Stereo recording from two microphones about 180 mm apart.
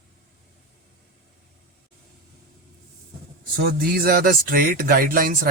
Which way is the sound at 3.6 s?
60° right (ahead or behind).